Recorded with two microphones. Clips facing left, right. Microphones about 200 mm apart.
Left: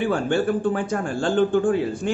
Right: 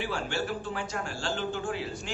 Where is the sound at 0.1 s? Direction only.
55° left (ahead or behind).